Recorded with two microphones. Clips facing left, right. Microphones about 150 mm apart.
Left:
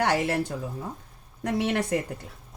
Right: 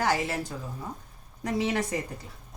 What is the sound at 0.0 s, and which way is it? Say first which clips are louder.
Speech: left 3 dB; 65° left (ahead or behind).